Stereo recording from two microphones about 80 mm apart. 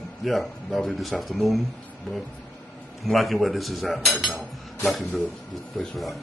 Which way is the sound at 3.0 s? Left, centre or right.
Centre.